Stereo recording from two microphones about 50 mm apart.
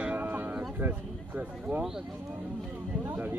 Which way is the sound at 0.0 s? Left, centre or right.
Right.